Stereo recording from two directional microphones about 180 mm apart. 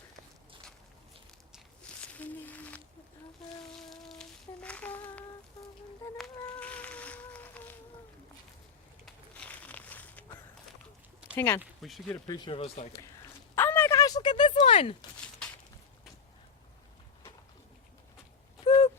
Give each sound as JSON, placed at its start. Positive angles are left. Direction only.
{"t": 1.5, "sound": "walk", "side_deg": 5}
{"t": 3.8, "sound": "music", "side_deg": 0}
{"t": 6.1, "sound": "insect", "side_deg": 5}
{"t": 9.0, "sound": "a sound", "side_deg": 5}
{"t": 11.3, "sound": "speech", "side_deg": 10}
{"t": 11.6, "sound": "speech", "side_deg": 0}
{"t": 12.1, "sound": "speech", "side_deg": 20}
{"t": 12.5, "sound": "speech", "side_deg": 35}
{"t": 13.6, "sound": "a sound", "side_deg": 10}
{"t": 18.6, "sound": "a sound", "side_deg": 25}